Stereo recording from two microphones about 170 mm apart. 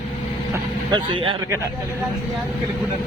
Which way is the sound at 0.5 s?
25° right (ahead or behind).